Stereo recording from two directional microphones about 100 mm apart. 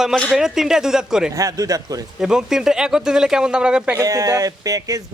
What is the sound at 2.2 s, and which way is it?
Speech, 5° right (ahead or behind).